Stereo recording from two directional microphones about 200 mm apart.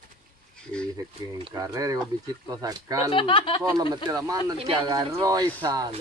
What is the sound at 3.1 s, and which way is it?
Speech, 25° left (ahead or behind).